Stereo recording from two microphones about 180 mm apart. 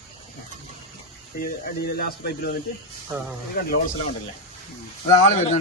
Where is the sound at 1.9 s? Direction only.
60° left (ahead or behind).